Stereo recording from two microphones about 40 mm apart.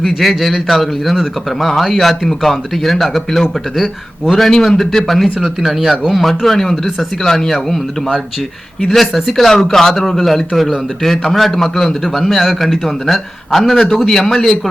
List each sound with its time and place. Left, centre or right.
0.2 s speech: centre
5.4 s speech: centre
6.2 s speech: centre
8.9 s speech: centre